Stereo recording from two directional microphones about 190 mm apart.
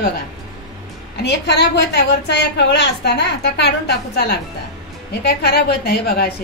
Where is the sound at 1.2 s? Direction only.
65° left (ahead or behind).